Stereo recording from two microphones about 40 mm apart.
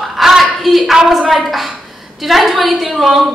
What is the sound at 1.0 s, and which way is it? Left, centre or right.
A woman's voice, centre.